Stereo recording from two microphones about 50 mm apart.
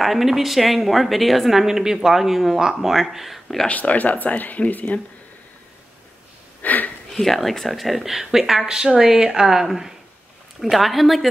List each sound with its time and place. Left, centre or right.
0.0 s a woman's voice: centre
3.6 s speech: left
6.6 s a sound: left
7.2 s a woman's voice: centre